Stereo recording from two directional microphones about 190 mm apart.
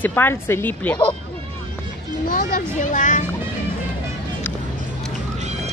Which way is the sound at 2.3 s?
45° left (ahead or behind).